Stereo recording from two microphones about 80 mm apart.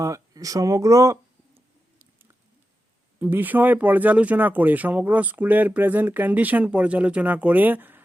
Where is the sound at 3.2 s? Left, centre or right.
Right.